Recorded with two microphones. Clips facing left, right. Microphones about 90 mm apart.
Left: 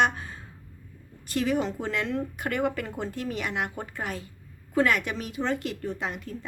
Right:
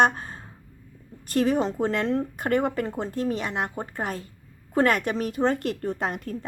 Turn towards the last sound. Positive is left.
turn(degrees=-45)  # may be behind; listen again after turning